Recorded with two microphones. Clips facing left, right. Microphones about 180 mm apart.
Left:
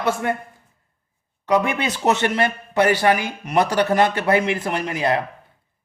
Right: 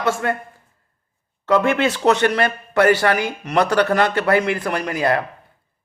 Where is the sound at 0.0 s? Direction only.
15° left (ahead or behind).